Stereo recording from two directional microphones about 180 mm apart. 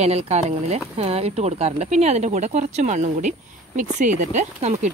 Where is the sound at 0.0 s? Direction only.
40° right (ahead or behind).